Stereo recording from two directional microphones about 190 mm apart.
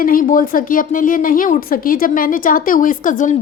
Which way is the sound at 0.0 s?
45° left (ahead or behind).